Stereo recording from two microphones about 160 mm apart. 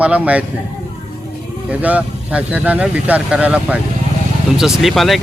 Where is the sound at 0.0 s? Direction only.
10° right (ahead or behind).